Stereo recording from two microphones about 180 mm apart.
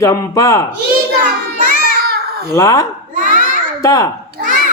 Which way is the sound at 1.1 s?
45° right (ahead or behind).